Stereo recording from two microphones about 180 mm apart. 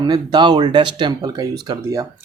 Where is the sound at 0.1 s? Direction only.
25° right (ahead or behind).